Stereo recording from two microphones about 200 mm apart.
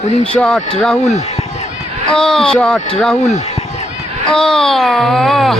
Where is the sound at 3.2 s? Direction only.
35° left (ahead or behind).